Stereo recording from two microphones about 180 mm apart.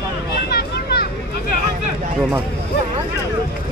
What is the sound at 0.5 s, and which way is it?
Children playing, 60° left (ahead or behind).